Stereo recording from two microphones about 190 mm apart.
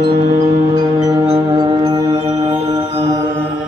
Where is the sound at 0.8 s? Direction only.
20° right (ahead or behind).